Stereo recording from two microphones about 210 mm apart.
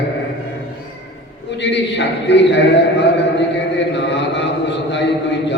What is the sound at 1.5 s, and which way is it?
A man's voice, 55° left (ahead or behind).